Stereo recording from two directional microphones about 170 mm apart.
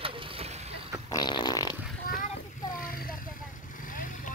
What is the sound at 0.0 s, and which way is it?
Vehicle, 30° right (ahead or behind).